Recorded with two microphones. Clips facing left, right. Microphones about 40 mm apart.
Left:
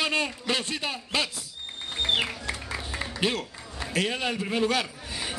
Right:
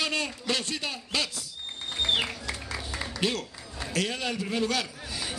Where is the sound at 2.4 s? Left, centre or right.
Left.